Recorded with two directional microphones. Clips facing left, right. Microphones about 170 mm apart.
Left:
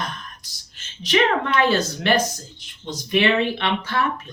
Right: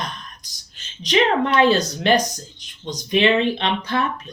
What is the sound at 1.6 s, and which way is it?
Speech, 20° right (ahead or behind).